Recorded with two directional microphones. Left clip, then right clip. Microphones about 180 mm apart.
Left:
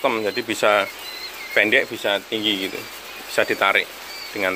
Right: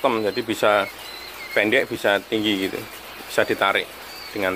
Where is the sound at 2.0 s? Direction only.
25° right (ahead or behind).